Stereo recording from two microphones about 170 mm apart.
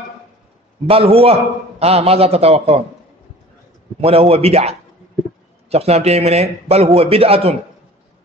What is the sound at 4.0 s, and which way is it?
A man's voice, 35° right (ahead or behind).